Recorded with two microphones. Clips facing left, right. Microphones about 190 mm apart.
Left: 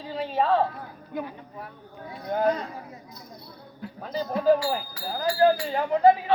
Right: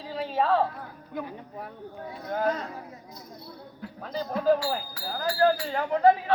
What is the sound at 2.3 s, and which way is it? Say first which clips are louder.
Speech: left 3 dB; 20° left (ahead or behind).